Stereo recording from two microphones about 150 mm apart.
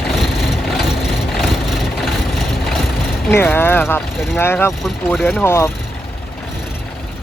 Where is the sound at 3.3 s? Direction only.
15° left (ahead or behind).